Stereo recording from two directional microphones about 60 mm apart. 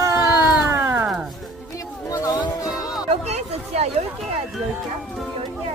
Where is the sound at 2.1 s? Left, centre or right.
Left.